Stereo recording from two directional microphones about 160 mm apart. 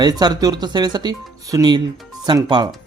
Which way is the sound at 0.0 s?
25° right (ahead or behind).